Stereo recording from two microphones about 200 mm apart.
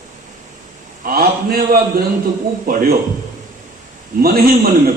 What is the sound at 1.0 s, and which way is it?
A man's voice, 50° right (ahead or behind).